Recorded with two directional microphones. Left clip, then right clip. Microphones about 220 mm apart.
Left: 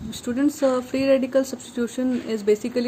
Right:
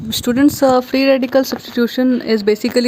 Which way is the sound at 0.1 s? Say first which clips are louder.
Right 10 dB; 45° right (ahead or behind).